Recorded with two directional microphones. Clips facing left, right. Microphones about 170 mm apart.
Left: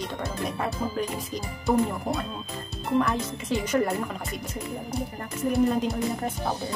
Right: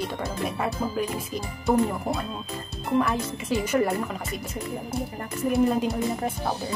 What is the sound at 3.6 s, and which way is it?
Speech, 10° right (ahead or behind).